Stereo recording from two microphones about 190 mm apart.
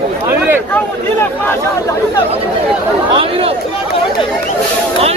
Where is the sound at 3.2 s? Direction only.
30° right (ahead or behind).